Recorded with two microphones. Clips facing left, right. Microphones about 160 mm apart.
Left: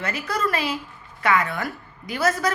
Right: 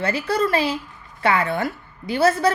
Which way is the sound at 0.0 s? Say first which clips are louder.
Right 5 dB; 30° right (ahead or behind).